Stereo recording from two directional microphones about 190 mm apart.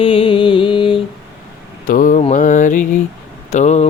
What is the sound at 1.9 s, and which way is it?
Mantra, 45° left (ahead or behind).